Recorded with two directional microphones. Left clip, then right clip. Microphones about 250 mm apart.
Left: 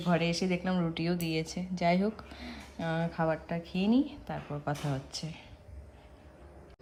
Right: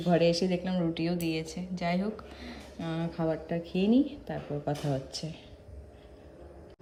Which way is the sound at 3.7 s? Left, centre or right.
Left.